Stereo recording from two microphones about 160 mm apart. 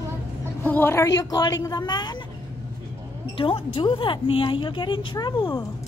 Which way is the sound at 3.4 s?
35° left (ahead or behind).